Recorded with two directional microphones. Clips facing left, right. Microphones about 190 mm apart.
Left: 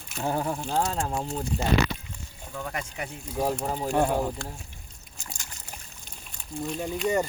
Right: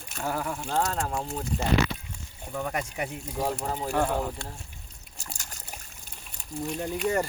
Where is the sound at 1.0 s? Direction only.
10° left (ahead or behind).